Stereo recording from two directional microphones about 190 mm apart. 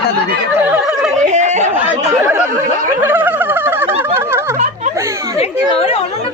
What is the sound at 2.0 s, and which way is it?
Chatter, 15° right (ahead or behind).